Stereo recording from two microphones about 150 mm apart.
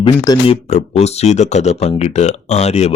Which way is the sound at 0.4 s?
45° left (ahead or behind).